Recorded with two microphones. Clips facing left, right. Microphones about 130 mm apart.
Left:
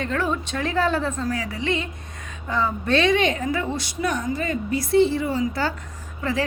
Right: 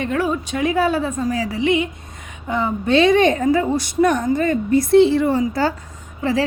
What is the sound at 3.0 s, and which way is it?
A woman's voice, 40° right (ahead or behind).